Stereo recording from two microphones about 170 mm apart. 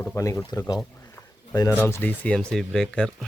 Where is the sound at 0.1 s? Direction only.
20° left (ahead or behind).